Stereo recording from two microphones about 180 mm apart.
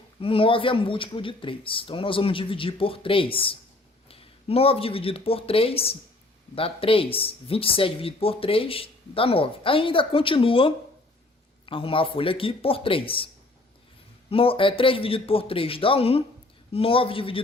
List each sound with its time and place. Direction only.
0.2 s speech: 30° left (ahead or behind)